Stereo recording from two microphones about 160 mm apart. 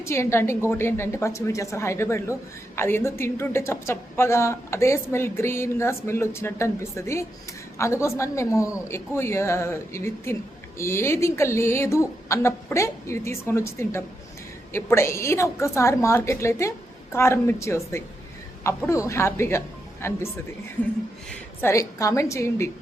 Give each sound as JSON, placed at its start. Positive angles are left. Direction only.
{"t": 0.0, "sound": "a woman's voice", "side_deg": 15}